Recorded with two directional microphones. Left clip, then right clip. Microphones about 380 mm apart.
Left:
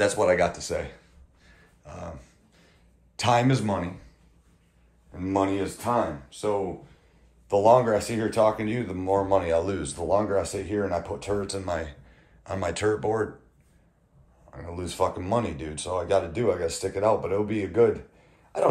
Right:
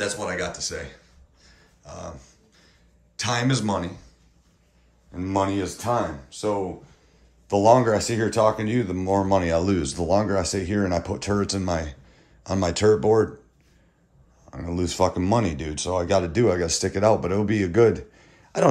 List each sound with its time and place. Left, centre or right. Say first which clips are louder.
0.0 s speech: left 6 dB; centre
1.4 s a sound: right 1 dB; centre
3.2 s speech: left 2 dB; centre
5.1 s speech: right 1 dB; right
14.7 s speech: right 4 dB; right